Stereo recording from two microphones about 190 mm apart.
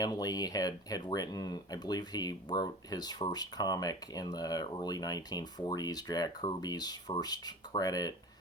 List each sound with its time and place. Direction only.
0.0 s speech: 20° left (ahead or behind)